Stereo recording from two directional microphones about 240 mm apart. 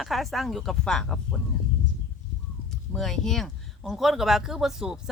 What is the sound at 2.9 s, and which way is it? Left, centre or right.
Speech, centre.